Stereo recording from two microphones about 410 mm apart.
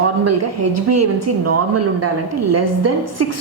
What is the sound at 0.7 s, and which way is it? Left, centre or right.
A woman's voice, right.